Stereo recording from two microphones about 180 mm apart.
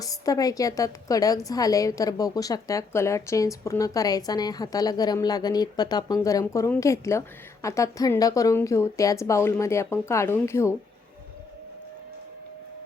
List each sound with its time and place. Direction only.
0.0 s a woman's voice: 20° left (ahead or behind)